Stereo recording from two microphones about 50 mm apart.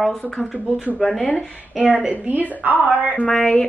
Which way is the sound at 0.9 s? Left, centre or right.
Centre.